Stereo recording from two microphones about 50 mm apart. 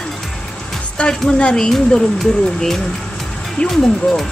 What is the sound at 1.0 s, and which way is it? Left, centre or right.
Speech, centre.